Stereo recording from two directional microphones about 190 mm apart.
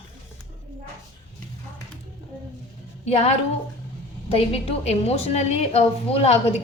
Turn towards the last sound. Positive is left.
turn(degrees=35)  # may be behind; listen again after turning